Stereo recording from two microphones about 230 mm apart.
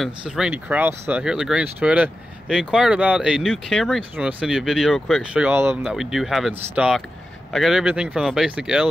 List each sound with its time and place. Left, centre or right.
0.0 s speech: centre